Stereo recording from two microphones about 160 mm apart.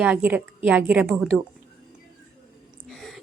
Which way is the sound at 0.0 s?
10° right (ahead or behind).